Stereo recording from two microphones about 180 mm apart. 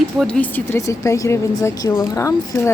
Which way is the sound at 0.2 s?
5° left (ahead or behind).